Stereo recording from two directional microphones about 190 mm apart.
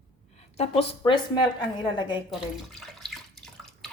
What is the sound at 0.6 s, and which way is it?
Speech, 30° left (ahead or behind).